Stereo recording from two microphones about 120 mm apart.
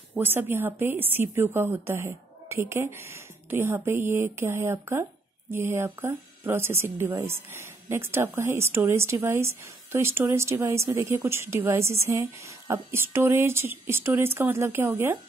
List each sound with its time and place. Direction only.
0.1 s speech: 15° right (ahead or behind)